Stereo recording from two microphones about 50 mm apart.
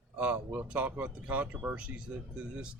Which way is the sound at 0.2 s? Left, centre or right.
Right.